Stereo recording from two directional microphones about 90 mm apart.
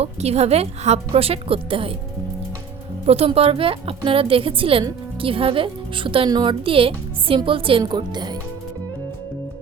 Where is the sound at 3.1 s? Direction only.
90° right.